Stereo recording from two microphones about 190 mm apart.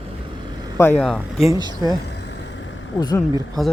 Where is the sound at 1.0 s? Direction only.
Centre (ahead or behind).